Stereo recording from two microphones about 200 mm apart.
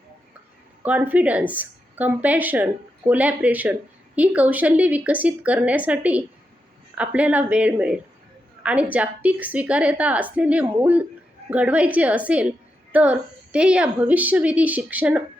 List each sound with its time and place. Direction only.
0.8 s speech: 10° right (ahead or behind)